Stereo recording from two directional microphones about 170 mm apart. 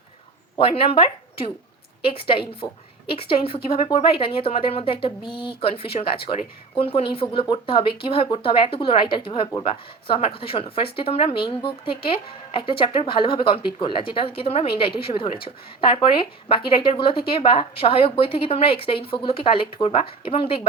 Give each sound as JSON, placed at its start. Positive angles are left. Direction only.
{"t": 0.6, "sound": "a woman's voice", "side_deg": 30}